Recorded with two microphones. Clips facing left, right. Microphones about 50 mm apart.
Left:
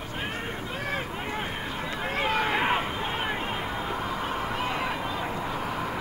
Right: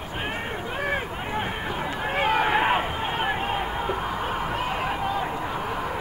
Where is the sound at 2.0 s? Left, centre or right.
Centre.